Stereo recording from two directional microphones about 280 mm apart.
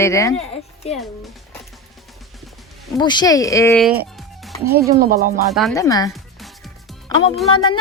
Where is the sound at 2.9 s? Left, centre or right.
Centre.